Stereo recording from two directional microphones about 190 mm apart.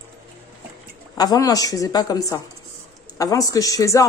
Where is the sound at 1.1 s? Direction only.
20° left (ahead or behind).